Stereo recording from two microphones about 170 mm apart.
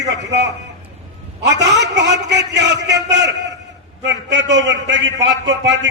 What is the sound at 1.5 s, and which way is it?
A man's voice, 90° right.